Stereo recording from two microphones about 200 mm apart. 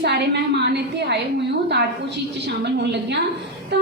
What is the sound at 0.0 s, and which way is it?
A woman's voice, 55° right (ahead or behind).